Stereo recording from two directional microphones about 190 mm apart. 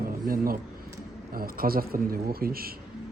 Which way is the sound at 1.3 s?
50° right (ahead or behind).